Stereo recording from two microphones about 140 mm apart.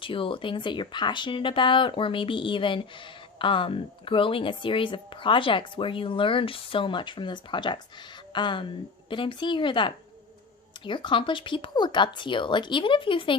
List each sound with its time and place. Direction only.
0.0 s speech: 40° left (ahead or behind)